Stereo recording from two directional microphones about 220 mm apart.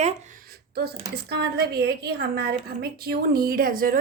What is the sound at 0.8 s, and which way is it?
Speech, 45° right (ahead or behind).